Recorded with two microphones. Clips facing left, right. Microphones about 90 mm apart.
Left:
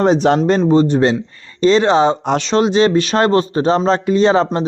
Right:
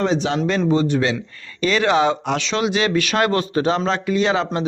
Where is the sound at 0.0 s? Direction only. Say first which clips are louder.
Left 7 dB; 45° left (ahead or behind).